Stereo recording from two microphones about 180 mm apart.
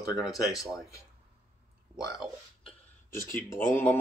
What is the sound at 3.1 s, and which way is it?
Speech, 50° left (ahead or behind).